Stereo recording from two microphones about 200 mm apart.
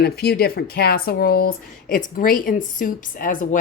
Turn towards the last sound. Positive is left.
turn(degrees=40)  # may be behind; listen again after turning